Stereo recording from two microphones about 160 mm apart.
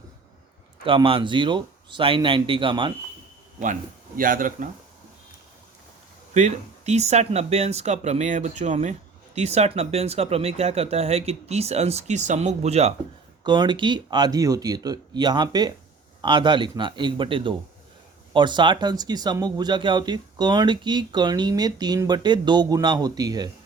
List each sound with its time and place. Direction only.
0.9 s speech: 35° right (ahead or behind)
4.2 s speech: 60° right (ahead or behind)
6.3 s speech: 45° right (ahead or behind)
13.4 s speech: 30° right (ahead or behind)